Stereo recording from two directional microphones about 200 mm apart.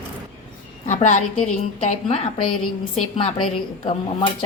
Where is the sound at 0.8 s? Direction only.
35° left (ahead or behind).